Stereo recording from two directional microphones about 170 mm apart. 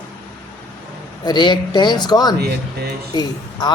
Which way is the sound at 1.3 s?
25° left (ahead or behind).